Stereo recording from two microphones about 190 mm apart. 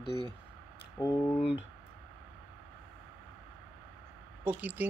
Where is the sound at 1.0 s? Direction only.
10° left (ahead or behind).